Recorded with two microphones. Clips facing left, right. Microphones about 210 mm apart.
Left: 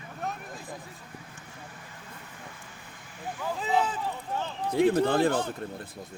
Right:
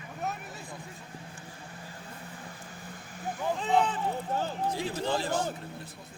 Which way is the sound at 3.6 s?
5° left (ahead or behind).